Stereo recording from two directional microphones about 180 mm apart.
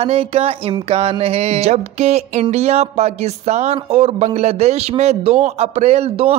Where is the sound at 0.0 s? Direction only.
35° right (ahead or behind).